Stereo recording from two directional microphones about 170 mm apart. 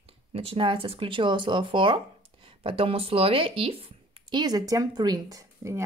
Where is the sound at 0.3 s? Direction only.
35° right (ahead or behind).